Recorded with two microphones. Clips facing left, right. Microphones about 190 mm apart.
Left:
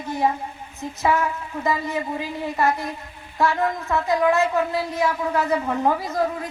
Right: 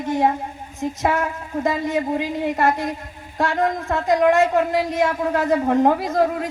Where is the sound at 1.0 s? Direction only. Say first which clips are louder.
Left 2 dB; 45° right (ahead or behind).